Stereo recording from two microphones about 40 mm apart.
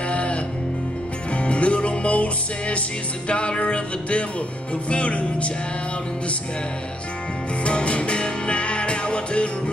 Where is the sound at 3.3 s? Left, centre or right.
Left.